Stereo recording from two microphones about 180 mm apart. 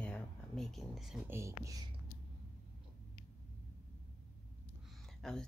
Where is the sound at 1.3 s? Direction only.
15° right (ahead or behind).